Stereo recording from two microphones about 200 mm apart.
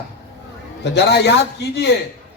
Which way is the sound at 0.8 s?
60° left (ahead or behind).